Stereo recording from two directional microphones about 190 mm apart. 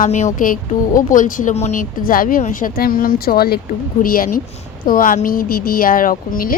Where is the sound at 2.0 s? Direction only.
50° left (ahead or behind).